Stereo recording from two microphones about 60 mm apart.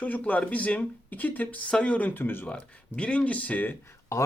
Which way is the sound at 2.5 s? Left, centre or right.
Centre.